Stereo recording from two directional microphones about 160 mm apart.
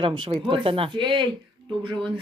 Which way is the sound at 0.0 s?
30° right (ahead or behind).